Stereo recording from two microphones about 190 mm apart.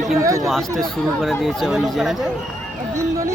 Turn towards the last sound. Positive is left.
turn(degrees=-15)  # may be behind; listen again after turning